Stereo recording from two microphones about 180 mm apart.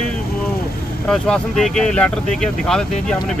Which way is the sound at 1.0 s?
5° left (ahead or behind).